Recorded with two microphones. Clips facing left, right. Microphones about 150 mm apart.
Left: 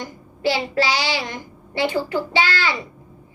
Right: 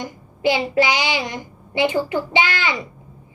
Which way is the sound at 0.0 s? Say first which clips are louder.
Right 2 dB; 15° right (ahead or behind).